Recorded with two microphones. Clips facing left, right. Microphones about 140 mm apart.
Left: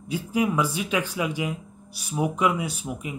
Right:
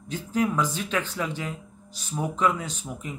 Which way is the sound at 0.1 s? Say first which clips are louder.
Left 1 dB; 10° left (ahead or behind).